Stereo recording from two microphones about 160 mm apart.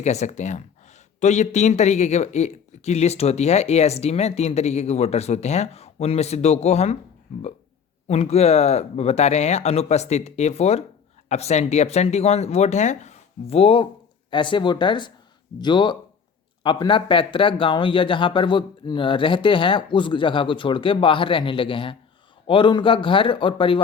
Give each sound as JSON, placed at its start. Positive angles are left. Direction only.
{"t": 0.0, "sound": "speech", "side_deg": 45}
{"t": 8.0, "sound": "speech", "side_deg": 40}